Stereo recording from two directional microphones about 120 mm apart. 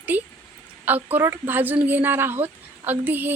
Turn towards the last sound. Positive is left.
turn(degrees=-15)  # may be behind; listen again after turning